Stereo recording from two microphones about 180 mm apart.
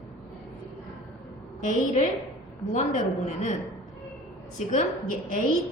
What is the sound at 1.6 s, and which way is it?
Speech, 40° left (ahead or behind).